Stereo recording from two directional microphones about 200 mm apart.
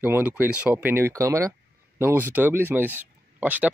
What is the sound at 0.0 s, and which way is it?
Speech, 10° right (ahead or behind).